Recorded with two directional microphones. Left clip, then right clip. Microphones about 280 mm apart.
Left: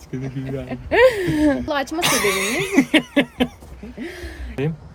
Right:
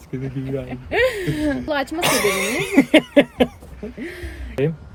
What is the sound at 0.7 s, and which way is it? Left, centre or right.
Speech, left.